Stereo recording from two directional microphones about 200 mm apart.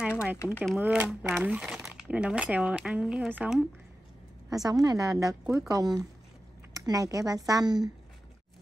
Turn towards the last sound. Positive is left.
turn(degrees=-20)  # may be behind; listen again after turning